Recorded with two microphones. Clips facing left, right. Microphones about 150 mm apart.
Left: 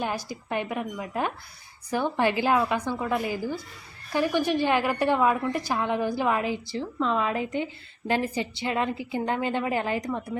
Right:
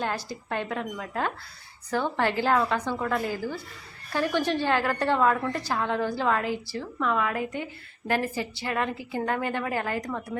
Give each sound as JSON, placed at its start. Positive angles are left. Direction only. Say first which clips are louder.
{"t": 0.0, "sound": "a woman's voice", "louder": "even", "side_deg": 15}